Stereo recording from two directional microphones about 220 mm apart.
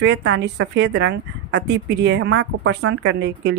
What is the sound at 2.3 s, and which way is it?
A woman's voice, 65° right (ahead or behind).